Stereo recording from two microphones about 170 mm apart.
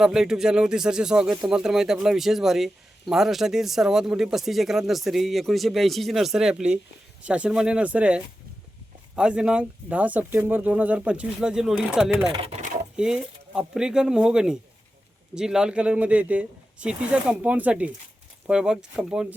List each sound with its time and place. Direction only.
0.0 s speech: 5° right (ahead or behind)
12.3 s a sound: 35° right (ahead or behind)
13.0 s speech: 5° right (ahead or behind)